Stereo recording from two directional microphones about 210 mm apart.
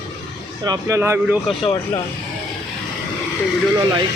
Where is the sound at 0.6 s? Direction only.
15° right (ahead or behind).